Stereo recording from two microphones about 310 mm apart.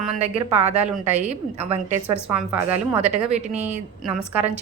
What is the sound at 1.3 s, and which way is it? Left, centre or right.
Speech, right.